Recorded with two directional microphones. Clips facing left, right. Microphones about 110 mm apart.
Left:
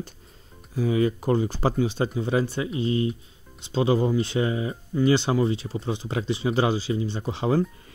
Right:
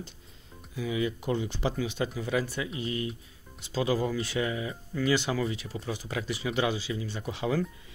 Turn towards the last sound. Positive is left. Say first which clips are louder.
# left 6 dB
turn(degrees=30)  # may be behind; listen again after turning